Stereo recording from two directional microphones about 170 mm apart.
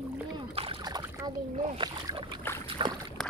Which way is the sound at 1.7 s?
30° right (ahead or behind).